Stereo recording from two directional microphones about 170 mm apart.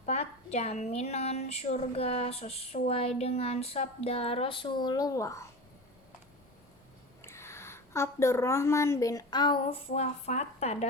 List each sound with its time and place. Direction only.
0.0 s a woman's voice: 40° left (ahead or behind); by 5.5 s 20° left (ahead or behind)
7.2 s a woman's voice: 15° left (ahead or behind); by 10.8 s 40° left (ahead or behind)